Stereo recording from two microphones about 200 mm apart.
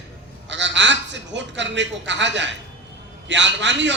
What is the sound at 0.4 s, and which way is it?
A man's voice, 65° right (ahead or behind).